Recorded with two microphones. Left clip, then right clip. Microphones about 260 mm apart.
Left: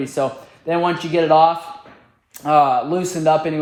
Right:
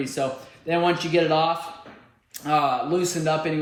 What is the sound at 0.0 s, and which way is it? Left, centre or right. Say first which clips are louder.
A man's voice: left 5 dB; left.